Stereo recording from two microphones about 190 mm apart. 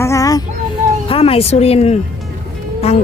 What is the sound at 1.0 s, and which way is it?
Speech, 30° left (ahead or behind).